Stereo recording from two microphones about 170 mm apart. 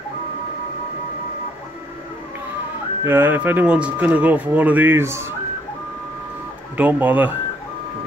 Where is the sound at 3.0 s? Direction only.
10° right (ahead or behind).